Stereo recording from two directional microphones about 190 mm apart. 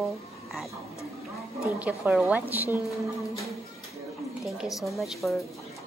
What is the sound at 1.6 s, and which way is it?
Speech, 5° right (ahead or behind).